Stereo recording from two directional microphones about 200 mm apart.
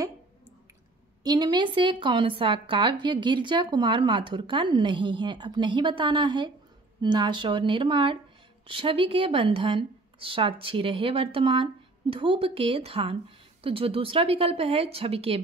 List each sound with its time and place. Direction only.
1.2 s a woman's voice: 20° right (ahead or behind)